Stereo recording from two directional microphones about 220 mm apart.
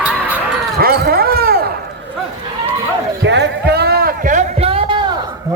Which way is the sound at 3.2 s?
50° right (ahead or behind).